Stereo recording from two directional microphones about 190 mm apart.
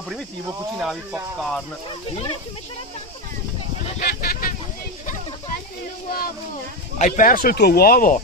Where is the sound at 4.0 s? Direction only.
50° left (ahead or behind).